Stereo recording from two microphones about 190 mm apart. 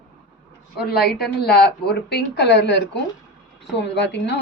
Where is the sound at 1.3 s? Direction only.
60° left (ahead or behind).